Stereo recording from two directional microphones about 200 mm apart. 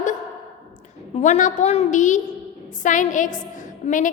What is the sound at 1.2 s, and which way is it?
A woman's voice, 40° left (ahead or behind).